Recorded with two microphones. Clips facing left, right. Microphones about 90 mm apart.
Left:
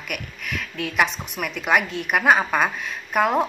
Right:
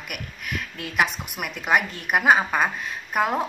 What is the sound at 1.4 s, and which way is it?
Speech, 25° right (ahead or behind).